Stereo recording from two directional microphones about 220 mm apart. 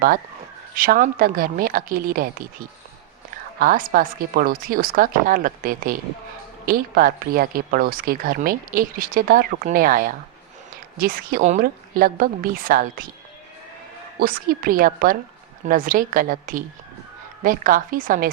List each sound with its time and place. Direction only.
0.8 s speech: 40° right (ahead or behind)
3.6 s speech: 40° right (ahead or behind)
14.2 s speech: 40° right (ahead or behind)